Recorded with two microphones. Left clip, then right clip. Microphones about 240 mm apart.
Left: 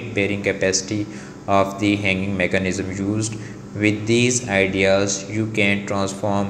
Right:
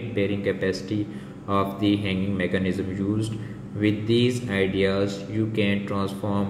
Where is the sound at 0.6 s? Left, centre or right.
Centre.